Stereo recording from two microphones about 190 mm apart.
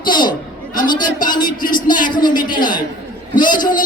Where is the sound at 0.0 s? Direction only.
25° left (ahead or behind).